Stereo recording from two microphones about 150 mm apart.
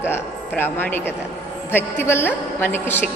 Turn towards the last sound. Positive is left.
turn(degrees=15)  # may be behind; listen again after turning